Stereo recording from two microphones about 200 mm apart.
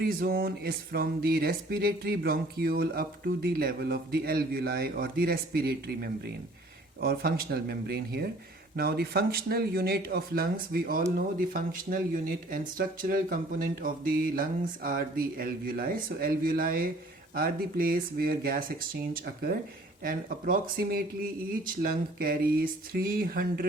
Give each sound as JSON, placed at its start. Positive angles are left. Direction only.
{"t": 0.0, "sound": "speech", "side_deg": -50}